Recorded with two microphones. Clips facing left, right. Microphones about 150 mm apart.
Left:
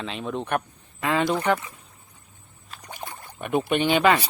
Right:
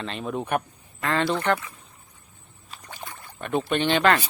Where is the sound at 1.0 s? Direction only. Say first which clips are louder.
Left 1 dB; 10° left (ahead or behind).